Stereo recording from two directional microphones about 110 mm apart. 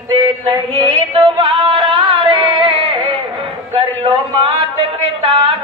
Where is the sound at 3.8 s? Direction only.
55° right (ahead or behind).